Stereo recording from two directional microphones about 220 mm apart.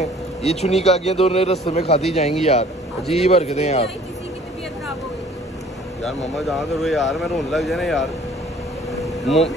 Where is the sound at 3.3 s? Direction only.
30° left (ahead or behind).